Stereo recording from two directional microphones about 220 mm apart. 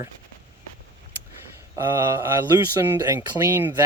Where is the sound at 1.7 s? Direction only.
10° right (ahead or behind).